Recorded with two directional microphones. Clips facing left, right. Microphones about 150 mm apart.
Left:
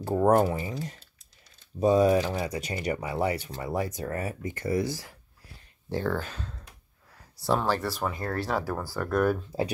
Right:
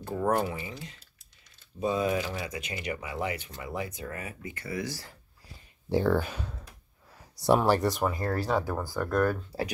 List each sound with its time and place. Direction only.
0.0 s speech: 35° left (ahead or behind)
5.9 s speech: 10° right (ahead or behind)
8.0 s speech: centre (ahead or behind)